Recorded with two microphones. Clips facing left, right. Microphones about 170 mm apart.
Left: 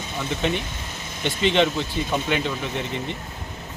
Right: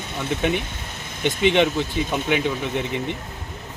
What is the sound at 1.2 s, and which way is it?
Speech, 15° right (ahead or behind).